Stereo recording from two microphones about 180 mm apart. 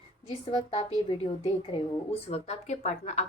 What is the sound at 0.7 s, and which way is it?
Speech, 30° left (ahead or behind).